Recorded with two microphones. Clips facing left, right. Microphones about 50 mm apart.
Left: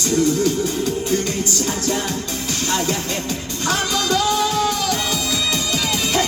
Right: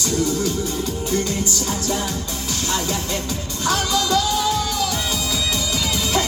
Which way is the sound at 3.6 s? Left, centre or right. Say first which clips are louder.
Even; left.